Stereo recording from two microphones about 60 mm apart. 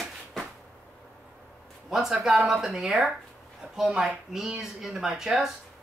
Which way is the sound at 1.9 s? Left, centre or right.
Centre.